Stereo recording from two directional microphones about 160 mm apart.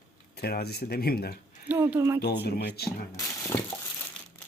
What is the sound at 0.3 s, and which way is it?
Speech, 85° left.